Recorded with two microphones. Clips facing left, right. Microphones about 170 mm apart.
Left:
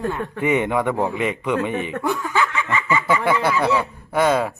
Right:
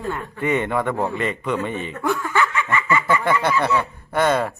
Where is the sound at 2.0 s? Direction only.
15° left (ahead or behind).